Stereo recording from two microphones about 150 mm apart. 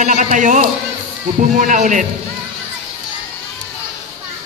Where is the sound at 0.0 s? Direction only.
55° right (ahead or behind).